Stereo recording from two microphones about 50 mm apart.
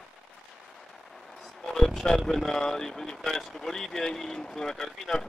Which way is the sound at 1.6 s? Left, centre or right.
Centre.